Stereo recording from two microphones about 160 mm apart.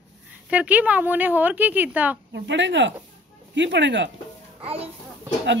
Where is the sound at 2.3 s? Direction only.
90° right.